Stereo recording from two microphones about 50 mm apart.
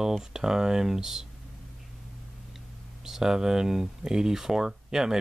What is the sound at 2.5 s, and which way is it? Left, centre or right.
Speech, centre.